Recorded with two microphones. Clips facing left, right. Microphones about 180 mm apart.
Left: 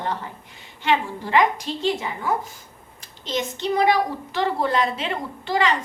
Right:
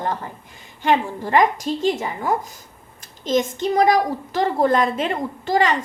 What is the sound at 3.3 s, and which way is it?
A woman's voice, 45° right (ahead or behind).